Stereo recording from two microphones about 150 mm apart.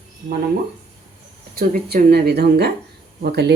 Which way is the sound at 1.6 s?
85° right.